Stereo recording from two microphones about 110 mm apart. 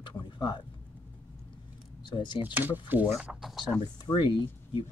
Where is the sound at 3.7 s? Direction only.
40° left (ahead or behind).